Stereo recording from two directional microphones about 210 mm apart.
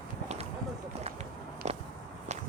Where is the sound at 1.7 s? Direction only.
35° right (ahead or behind).